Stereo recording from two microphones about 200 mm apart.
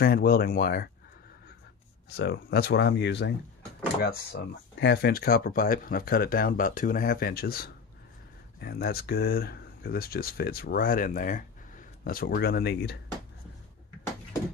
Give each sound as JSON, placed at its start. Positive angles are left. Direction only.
{"t": 0.0, "sound": "speech", "side_deg": 50}
{"t": 2.1, "sound": "speech", "side_deg": 55}